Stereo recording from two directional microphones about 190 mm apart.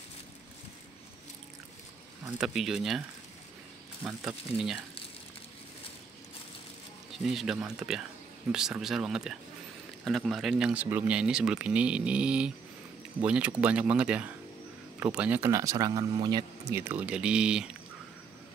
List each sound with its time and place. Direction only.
2.4 s speech: centre (ahead or behind)
4.0 s speech: 15° right (ahead or behind)
7.2 s speech: 5° right (ahead or behind); by 16.8 s 20° right (ahead or behind)
16.8 s speech: 5° right (ahead or behind)